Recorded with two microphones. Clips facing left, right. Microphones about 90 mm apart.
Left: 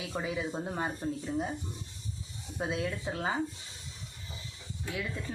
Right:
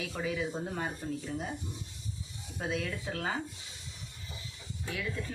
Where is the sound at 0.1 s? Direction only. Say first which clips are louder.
Left 2 dB; 20° left (ahead or behind).